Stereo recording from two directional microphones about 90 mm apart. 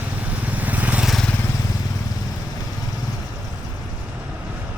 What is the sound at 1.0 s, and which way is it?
Vehicle, centre (ahead or behind).